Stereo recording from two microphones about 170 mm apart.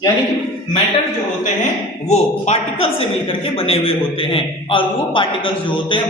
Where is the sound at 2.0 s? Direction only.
40° left (ahead or behind).